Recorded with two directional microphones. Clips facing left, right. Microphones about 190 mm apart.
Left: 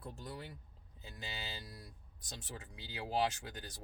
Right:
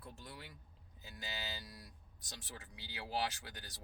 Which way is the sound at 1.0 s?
30° left (ahead or behind).